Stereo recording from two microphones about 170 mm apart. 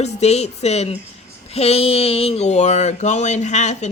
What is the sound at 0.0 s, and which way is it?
A woman's voice, 40° left (ahead or behind).